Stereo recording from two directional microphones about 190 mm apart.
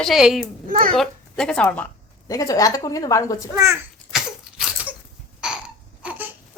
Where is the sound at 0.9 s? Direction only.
5° left (ahead or behind).